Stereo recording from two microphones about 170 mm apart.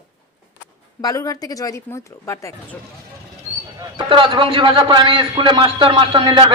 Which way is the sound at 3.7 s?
30° right (ahead or behind).